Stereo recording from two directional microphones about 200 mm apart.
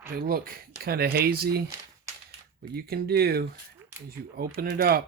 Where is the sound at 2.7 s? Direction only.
50° right (ahead or behind).